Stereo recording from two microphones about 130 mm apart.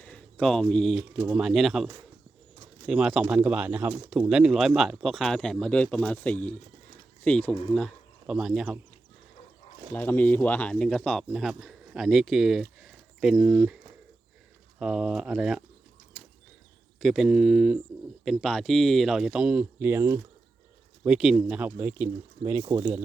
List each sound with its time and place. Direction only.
0.0 s a sound: 5° left (ahead or behind)
1.3 s speech: centre (ahead or behind)
9.9 s speech: 15° left (ahead or behind); by 13.7 s 5° right (ahead or behind)
14.8 s speech: 5° right (ahead or behind)
17.0 s speech: centre (ahead or behind); by 20.1 s 20° right (ahead or behind)
21.0 s speech: 5° right (ahead or behind)
21.8 s speech: 15° right (ahead or behind)